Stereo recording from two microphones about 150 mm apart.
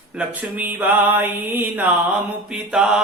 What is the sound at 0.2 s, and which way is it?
Speech, 10° right (ahead or behind).